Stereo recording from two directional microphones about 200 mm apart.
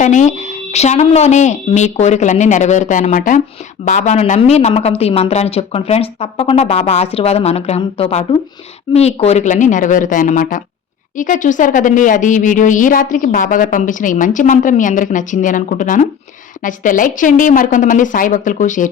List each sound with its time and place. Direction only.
0.0 s speech: 40° left (ahead or behind)